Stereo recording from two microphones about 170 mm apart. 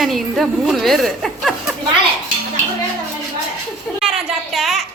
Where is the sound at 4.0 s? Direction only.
Centre (ahead or behind).